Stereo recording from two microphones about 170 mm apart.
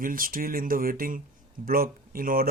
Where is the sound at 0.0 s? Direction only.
55° right (ahead or behind).